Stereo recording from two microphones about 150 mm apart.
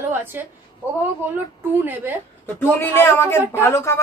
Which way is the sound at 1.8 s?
15° right (ahead or behind).